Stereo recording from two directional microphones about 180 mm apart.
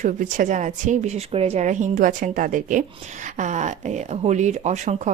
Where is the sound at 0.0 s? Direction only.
45° right (ahead or behind).